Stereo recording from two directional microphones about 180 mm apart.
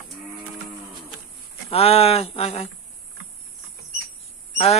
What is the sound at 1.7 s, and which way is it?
Speech, 35° left (ahead or behind).